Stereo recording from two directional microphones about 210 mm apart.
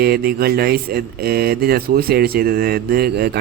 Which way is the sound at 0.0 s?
45° right (ahead or behind).